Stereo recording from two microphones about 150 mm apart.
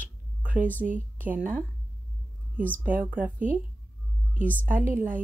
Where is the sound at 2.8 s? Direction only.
10° right (ahead or behind).